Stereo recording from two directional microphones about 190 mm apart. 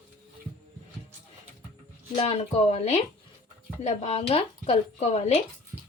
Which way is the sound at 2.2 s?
35° left (ahead or behind).